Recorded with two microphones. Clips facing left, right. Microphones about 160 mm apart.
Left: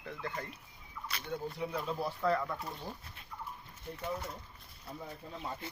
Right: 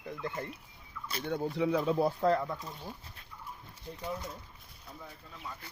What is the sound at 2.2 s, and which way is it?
Speech, 35° right (ahead or behind).